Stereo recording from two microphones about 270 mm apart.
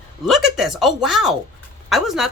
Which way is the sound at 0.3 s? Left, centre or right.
Centre.